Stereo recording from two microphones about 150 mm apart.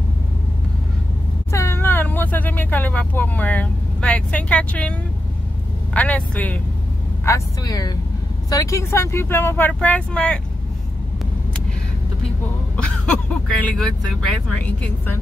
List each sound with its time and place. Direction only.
1.5 s speech: 20° left (ahead or behind)
5.9 s speech: 10° left (ahead or behind)
7.2 s speech: 20° left (ahead or behind); by 10.4 s 5° left (ahead or behind)
12.7 s speech: 5° left (ahead or behind)